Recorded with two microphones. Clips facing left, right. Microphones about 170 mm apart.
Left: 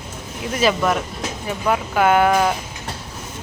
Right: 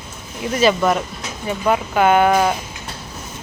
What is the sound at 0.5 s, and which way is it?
Speech, centre (ahead or behind).